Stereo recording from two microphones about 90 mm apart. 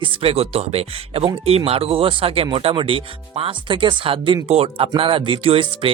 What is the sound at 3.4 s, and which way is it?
Speech, 70° right (ahead or behind).